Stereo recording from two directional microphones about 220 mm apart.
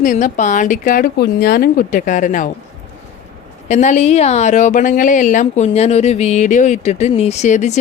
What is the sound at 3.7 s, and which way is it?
A woman's voice, 30° left (ahead or behind).